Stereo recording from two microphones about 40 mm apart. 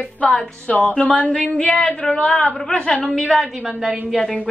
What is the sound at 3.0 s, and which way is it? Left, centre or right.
Speech, centre.